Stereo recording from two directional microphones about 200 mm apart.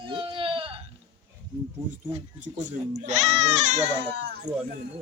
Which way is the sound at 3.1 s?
35° right (ahead or behind).